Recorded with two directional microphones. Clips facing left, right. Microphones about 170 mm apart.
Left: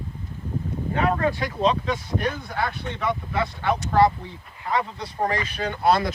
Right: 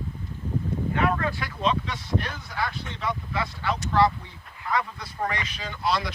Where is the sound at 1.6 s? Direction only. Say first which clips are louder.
Left 3 dB; 40° left (ahead or behind).